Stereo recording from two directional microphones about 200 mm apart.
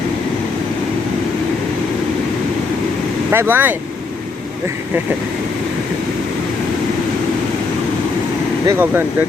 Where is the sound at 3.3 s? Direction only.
10° right (ahead or behind).